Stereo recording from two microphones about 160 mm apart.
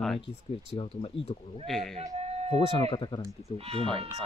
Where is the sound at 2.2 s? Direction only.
40° right (ahead or behind).